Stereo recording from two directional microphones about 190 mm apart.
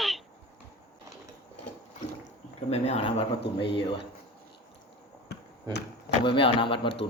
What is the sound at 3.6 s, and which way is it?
Speech, 65° left (ahead or behind).